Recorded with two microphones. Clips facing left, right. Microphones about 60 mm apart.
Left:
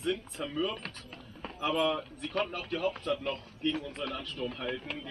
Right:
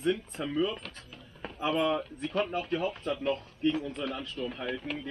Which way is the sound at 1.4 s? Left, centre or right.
Centre.